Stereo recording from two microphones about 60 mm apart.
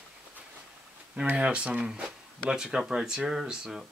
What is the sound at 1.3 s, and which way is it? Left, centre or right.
Speech, centre.